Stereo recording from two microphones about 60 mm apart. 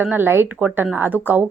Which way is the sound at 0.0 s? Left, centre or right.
Right.